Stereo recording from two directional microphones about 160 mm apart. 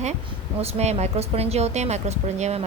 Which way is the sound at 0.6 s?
40° right (ahead or behind).